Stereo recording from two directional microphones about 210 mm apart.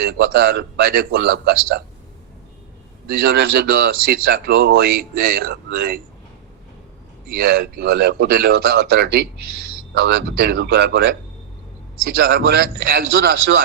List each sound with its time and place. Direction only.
0.0 s a man's voice: 45° right (ahead or behind)
3.1 s a man's voice: 50° right (ahead or behind)
7.3 s a man's voice: 50° right (ahead or behind)